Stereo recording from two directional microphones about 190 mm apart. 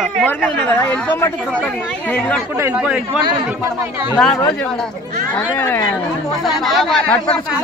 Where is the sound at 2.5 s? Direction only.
10° right (ahead or behind).